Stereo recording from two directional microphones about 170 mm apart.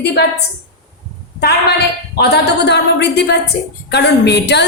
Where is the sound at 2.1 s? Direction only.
75° left (ahead or behind).